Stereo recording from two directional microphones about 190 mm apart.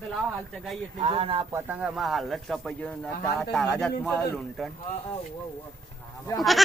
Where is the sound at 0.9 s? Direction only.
30° right (ahead or behind).